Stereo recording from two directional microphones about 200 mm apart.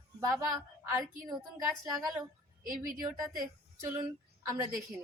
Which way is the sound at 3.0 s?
15° right (ahead or behind).